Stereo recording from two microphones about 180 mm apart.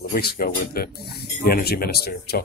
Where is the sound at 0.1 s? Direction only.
55° left (ahead or behind).